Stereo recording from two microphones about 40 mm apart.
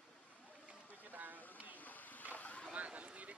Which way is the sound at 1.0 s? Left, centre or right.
Right.